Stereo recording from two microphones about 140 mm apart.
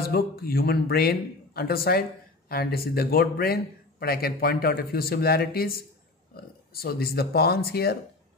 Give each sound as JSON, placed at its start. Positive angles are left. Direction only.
{"t": 0.0, "sound": "a man's voice", "side_deg": 90}